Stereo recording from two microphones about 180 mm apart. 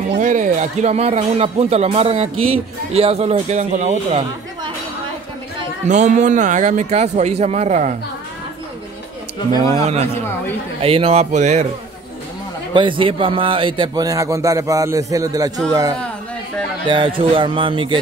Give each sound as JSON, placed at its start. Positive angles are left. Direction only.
{"t": 0.2, "sound": "speech", "side_deg": -45}
{"t": 5.9, "sound": "speech", "side_deg": -40}
{"t": 9.8, "sound": "speech", "side_deg": -35}
{"t": 12.7, "sound": "a man's voice", "side_deg": -30}